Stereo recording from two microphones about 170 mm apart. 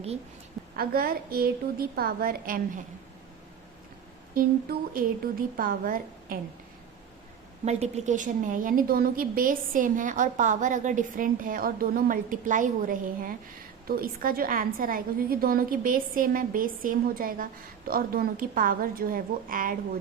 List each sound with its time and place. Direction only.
0.8 s a woman's voice: 65° right (ahead or behind)
4.4 s a woman's voice: 60° right (ahead or behind)
7.6 s a woman's voice: 40° right (ahead or behind)